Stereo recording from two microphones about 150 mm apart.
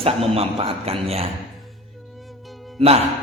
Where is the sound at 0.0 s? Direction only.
40° right (ahead or behind).